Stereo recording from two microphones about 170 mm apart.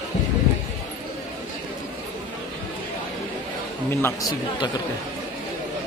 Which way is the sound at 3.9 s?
15° left (ahead or behind).